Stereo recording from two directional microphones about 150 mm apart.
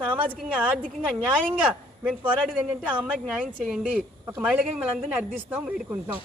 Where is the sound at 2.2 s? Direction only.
10° right (ahead or behind).